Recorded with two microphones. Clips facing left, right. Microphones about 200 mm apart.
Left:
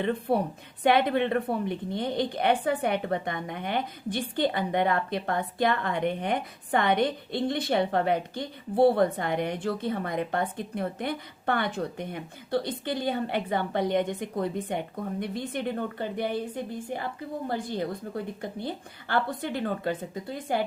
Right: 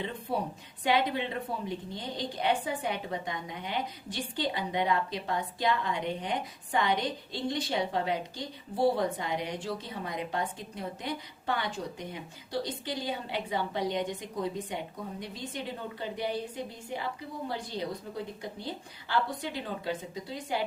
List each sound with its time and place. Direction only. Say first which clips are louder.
0.0 s a woman's voice: left 7 dB; 60° left (ahead or behind)